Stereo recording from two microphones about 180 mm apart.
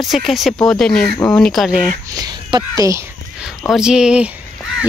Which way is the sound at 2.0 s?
20° right (ahead or behind).